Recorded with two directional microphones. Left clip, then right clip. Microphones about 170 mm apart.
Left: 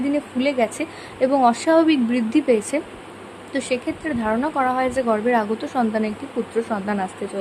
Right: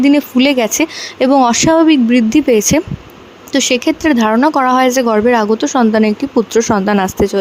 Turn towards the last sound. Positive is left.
turn(degrees=-55)  # may be behind; listen again after turning